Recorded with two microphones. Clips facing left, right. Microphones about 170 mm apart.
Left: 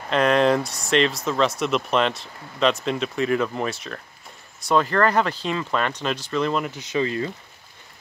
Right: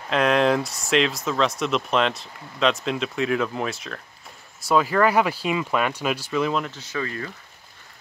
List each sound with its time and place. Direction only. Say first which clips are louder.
0.1 s speech: left 1 dB; centre (ahead or behind)
6.6 s speech: left 5 dB; 15° left (ahead or behind)